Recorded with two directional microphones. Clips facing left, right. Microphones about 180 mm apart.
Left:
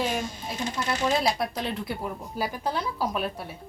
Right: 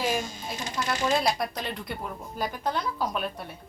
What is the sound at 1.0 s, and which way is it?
A woman's voice, centre (ahead or behind).